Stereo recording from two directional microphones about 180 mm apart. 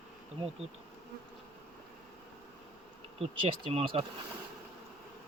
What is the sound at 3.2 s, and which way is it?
Speech, 30° right (ahead or behind).